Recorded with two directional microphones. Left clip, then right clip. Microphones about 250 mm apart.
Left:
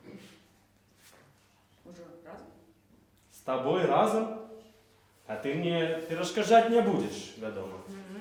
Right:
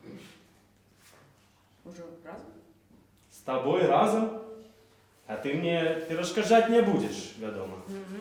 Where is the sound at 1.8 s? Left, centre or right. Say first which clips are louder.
Right 3 dB; centre.